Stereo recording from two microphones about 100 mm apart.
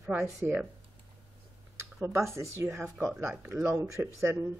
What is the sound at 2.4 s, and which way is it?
Speech, 30° right (ahead or behind).